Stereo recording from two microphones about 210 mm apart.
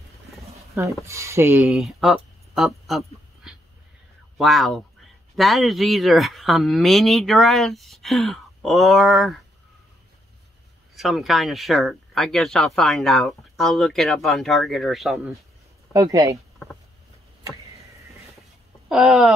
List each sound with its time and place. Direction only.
1.0 s speech: 15° right (ahead or behind)
1.7 s speech: centre (ahead or behind)
11.0 s speech: centre (ahead or behind)
15.9 s speech: 15° right (ahead or behind)
18.9 s speech: centre (ahead or behind)